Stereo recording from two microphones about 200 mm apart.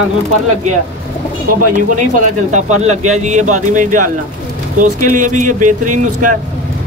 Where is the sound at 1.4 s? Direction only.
40° right (ahead or behind).